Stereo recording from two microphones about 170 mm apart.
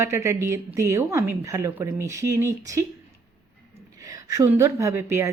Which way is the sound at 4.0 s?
20° right (ahead or behind).